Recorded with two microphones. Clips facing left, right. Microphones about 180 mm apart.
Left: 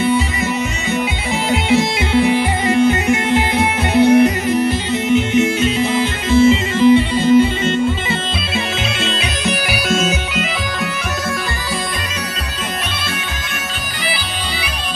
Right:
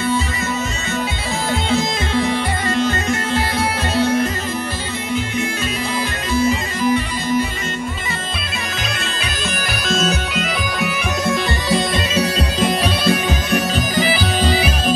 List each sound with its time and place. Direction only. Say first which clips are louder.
1.5 s music: left 4 dB; 15° left (ahead or behind)
9.0 s bagpipes: left 5 dB; 20° left (ahead or behind)
9.7 s bagpipes: right 1 dB; 10° left (ahead or behind)
11.2 s music: right 4 dB; 20° right (ahead or behind)